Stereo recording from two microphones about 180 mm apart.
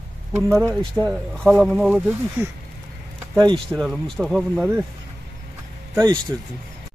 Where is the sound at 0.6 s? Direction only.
15° right (ahead or behind).